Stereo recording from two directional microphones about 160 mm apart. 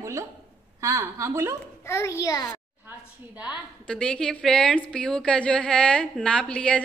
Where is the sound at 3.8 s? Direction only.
5° left (ahead or behind).